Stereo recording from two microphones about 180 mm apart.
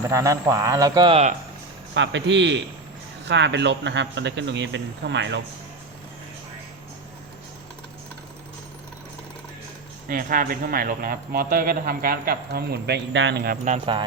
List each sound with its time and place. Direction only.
0.1 s speech: 15° right (ahead or behind)
2.0 s a man's voice: 90° right
10.1 s speech: 50° right (ahead or behind)